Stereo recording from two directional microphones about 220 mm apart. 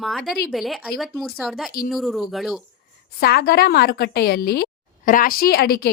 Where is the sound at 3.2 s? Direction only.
45° left (ahead or behind).